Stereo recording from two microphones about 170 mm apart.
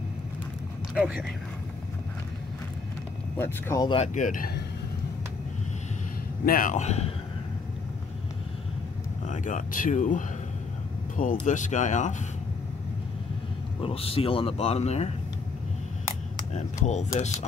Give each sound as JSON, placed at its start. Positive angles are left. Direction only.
{"t": 0.9, "sound": "speech", "side_deg": -5}
{"t": 3.3, "sound": "speech", "side_deg": 15}
{"t": 3.8, "sound": "speech", "side_deg": 30}
{"t": 4.1, "sound": "speech", "side_deg": 50}
{"t": 6.4, "sound": "speech", "side_deg": 55}
{"t": 9.2, "sound": "speech", "side_deg": 45}
{"t": 11.4, "sound": "speech", "side_deg": 45}
{"t": 13.8, "sound": "speech", "side_deg": 35}
{"t": 16.5, "sound": "speech", "side_deg": 45}